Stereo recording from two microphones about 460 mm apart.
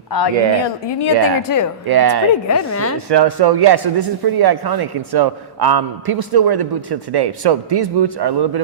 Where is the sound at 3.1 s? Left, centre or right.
Right.